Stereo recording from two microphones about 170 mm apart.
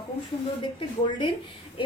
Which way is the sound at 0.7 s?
30° left (ahead or behind).